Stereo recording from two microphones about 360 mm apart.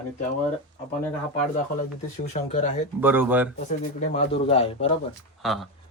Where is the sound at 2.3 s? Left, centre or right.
Centre.